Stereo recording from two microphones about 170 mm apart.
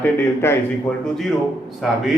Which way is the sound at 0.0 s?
10° left (ahead or behind).